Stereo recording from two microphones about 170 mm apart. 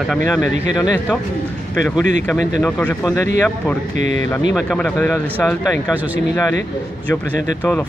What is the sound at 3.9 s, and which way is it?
Speech, 45° right (ahead or behind).